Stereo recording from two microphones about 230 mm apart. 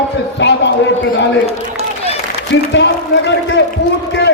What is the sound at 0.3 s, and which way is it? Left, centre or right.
Speech, left.